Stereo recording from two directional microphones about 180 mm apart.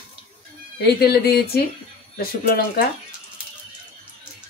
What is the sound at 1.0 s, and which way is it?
Speech, 60° left (ahead or behind).